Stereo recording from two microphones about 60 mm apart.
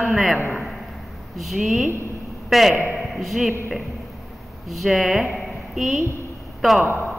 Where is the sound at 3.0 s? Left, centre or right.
Centre.